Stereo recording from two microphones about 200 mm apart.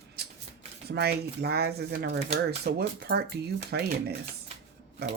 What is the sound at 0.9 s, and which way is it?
Speech, 55° right (ahead or behind).